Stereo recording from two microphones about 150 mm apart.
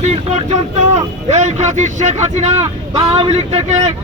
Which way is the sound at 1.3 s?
50° right (ahead or behind).